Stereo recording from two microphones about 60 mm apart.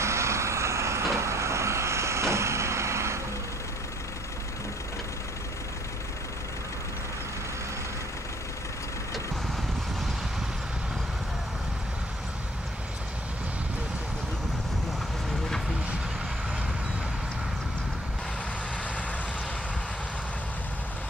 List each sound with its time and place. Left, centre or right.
0.0 s vehicle: right